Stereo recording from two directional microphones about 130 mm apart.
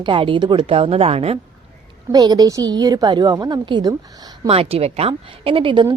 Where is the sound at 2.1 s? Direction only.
30° right (ahead or behind).